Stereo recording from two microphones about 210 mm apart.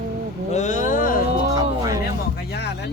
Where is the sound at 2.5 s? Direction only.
50° left (ahead or behind).